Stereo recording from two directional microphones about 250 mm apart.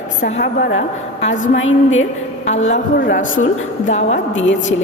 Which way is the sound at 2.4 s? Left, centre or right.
Left.